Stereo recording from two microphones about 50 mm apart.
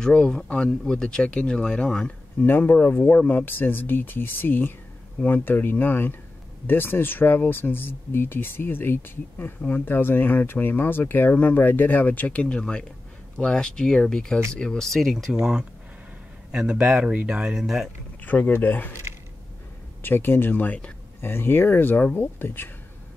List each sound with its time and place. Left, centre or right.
0.0 s speech: centre
2.4 s speech: left; by 15.3 s centre
15.3 s speech: centre
18.2 s speech: left
20.0 s speech: left
21.2 s speech: left